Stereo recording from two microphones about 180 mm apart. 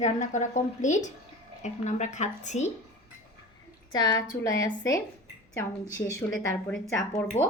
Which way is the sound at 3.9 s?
25° left (ahead or behind).